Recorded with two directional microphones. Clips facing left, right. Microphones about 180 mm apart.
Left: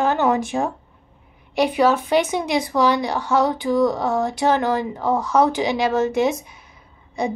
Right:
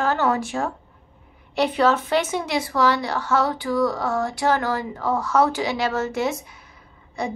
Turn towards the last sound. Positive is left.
turn(degrees=20)  # may be behind; listen again after turning